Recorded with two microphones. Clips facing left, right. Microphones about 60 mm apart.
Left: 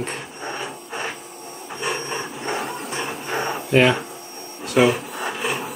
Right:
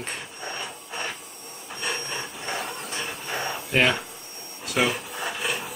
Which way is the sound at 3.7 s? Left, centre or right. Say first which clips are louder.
Left 6 dB; centre.